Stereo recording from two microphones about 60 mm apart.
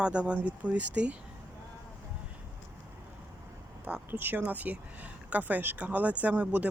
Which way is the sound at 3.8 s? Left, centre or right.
Right.